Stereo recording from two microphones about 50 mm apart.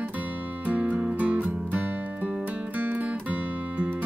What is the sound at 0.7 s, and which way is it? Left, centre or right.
Music, right.